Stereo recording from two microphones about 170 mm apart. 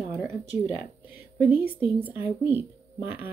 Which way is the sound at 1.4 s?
10° right (ahead or behind).